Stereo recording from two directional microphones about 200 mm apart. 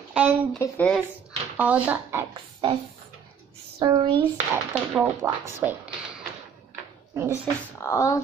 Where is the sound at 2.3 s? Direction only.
25° right (ahead or behind).